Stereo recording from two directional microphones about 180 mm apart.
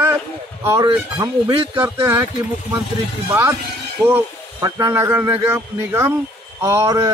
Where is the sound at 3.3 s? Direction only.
15° right (ahead or behind).